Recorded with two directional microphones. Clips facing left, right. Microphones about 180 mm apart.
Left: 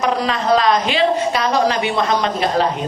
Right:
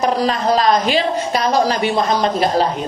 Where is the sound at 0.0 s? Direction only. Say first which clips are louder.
Right 2 dB; 40° right (ahead or behind).